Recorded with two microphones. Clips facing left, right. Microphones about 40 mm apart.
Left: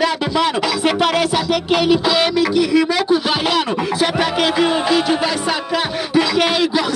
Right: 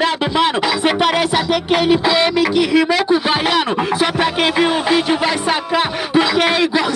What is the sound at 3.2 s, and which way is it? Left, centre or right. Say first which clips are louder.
Music: right 2 dB; centre.